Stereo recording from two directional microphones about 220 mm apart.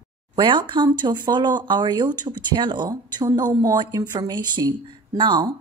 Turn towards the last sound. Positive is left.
turn(degrees=-20)  # may be behind; listen again after turning